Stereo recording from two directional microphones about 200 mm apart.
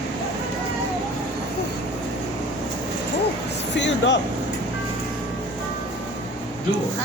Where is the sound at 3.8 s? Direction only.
60° left (ahead or behind).